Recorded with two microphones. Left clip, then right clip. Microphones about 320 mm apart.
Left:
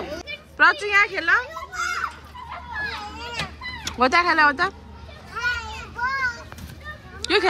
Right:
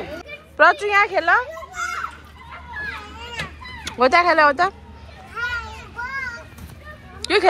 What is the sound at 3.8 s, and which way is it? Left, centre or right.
Speech, centre.